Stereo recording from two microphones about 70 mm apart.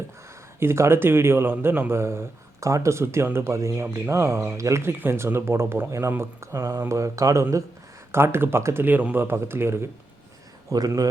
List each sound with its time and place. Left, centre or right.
0.6 s speech: right
8.1 s speech: right
10.7 s a man's voice: right